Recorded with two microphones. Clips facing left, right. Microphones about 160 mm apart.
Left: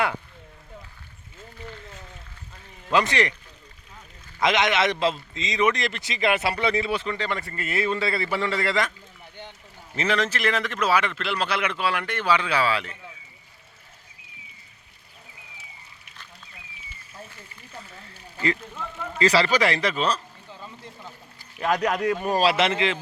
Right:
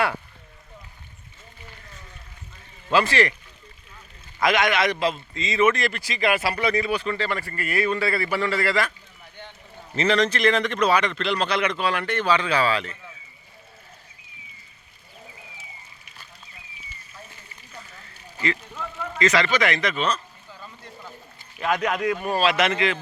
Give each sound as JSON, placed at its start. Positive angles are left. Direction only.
{"t": 2.9, "sound": "a man's voice", "side_deg": 20}
{"t": 4.4, "sound": "a man's voice", "side_deg": 20}
{"t": 6.4, "sound": "speech", "side_deg": 0}
{"t": 6.7, "sound": "a man's voice", "side_deg": 25}
{"t": 9.9, "sound": "a man's voice", "side_deg": 10}
{"t": 19.2, "sound": "speech", "side_deg": 35}
{"t": 21.6, "sound": "a man's voice", "side_deg": 35}